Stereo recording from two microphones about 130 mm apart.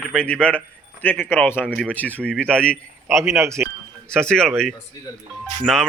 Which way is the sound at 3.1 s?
20° right (ahead or behind).